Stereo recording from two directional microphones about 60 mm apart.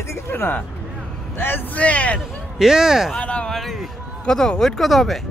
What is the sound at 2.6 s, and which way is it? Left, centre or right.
Speech, centre.